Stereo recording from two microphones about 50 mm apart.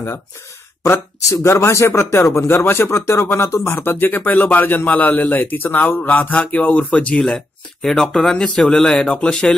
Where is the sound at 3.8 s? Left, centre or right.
Left.